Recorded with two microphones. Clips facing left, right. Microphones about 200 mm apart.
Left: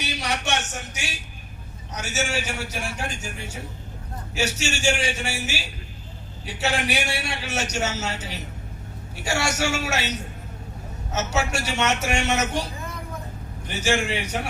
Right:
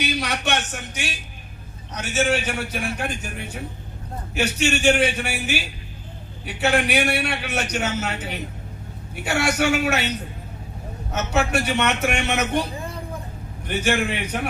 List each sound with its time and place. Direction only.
0.0 s a sound: 60° right (ahead or behind)
2.0 s a man's voice: 55° right (ahead or behind)
11.1 s a man's voice: 55° right (ahead or behind)
13.7 s a man's voice: 60° right (ahead or behind)